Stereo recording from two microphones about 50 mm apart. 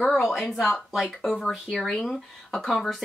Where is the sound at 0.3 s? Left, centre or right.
Centre.